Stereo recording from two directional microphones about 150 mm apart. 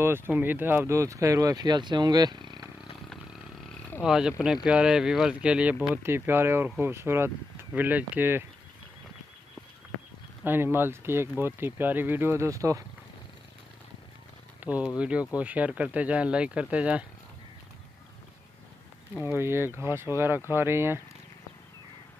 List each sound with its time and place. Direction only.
0.0 s speech: 15° right (ahead or behind)
4.0 s speech: 5° right (ahead or behind)
10.4 s speech: 15° right (ahead or behind)
14.6 s speech: 10° right (ahead or behind)
19.1 s speech: 15° right (ahead or behind)